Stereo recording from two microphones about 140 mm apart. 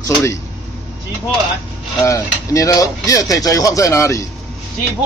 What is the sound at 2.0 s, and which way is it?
Speech, 20° left (ahead or behind).